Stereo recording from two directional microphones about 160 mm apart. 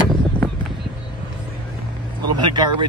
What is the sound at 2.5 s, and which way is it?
Speech, 30° right (ahead or behind).